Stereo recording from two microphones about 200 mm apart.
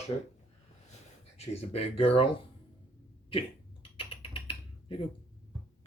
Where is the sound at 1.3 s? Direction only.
30° left (ahead or behind).